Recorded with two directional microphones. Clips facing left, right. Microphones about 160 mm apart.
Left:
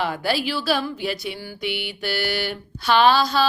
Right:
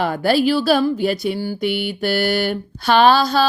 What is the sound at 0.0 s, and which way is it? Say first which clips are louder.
A woman's voice: right 7 dB; 45° right (ahead or behind).